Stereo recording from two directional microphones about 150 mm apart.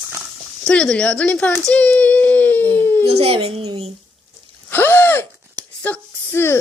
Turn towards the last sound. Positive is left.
turn(degrees=15)  # may be behind; listen again after turning